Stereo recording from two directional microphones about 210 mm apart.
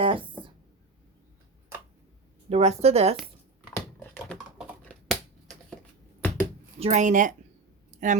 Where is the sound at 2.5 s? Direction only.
30° right (ahead or behind).